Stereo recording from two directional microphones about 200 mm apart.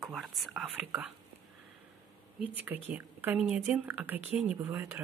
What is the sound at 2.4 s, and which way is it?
A woman's voice, 10° right (ahead or behind).